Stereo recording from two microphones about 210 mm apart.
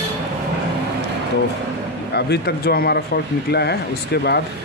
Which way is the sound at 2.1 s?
50° left (ahead or behind).